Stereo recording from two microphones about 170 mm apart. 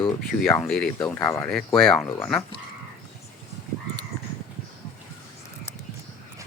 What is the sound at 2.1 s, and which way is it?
Speech, 10° left (ahead or behind).